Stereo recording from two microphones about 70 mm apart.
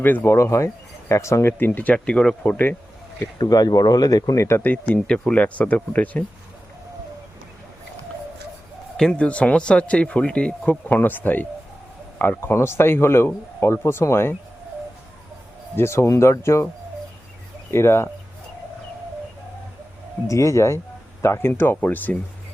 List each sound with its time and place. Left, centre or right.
0.0 s speech: left
0.3 s speech: left; by 2.6 s centre
3.4 s speech: left
4.4 s speech: left
4.9 s speech: centre
9.0 s speech: centre
10.8 s speech: left
15.7 s speech: left
17.7 s speech: left
20.2 s speech: left